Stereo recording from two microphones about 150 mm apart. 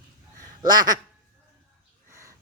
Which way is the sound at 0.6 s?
25° right (ahead or behind).